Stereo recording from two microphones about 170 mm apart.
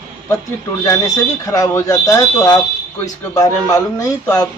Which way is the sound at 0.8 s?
20° left (ahead or behind).